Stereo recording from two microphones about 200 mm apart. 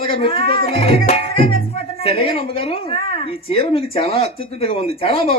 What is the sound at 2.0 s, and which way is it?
A woman's voice, 30° left (ahead or behind).